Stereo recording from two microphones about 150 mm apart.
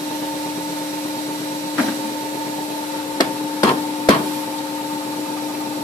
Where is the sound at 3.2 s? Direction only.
25° left (ahead or behind).